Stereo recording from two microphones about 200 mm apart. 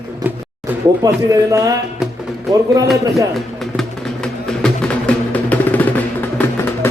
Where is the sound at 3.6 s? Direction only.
Centre (ahead or behind).